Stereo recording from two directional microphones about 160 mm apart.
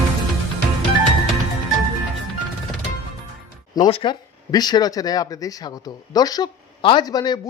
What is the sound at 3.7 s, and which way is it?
Speech, 25° left (ahead or behind).